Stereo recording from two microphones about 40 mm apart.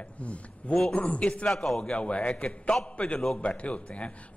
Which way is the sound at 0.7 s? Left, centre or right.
Centre.